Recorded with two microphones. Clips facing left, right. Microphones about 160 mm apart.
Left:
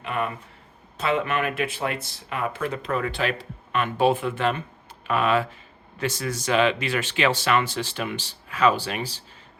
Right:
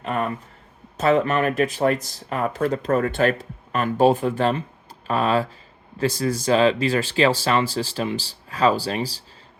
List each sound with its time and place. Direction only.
0.0 s speech: 40° right (ahead or behind)